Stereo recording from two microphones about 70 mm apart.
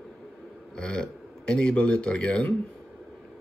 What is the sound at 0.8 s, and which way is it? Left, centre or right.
Speech, centre.